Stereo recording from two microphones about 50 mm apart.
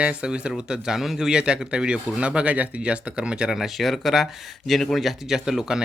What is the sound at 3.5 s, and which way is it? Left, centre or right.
Speech, centre.